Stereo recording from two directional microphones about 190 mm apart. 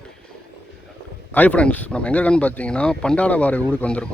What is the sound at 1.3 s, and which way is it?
Speech, 10° left (ahead or behind).